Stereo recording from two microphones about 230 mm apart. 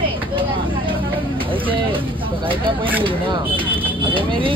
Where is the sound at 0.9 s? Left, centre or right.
Right.